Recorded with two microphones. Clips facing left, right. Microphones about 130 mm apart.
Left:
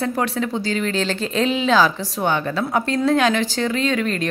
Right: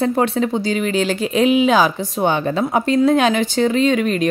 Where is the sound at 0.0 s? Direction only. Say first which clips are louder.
Right 5 dB; 25° right (ahead or behind).